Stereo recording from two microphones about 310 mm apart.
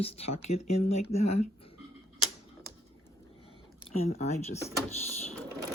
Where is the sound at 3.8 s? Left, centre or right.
Left.